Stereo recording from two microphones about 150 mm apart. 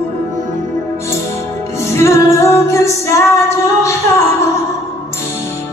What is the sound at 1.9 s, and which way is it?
Music, 20° left (ahead or behind).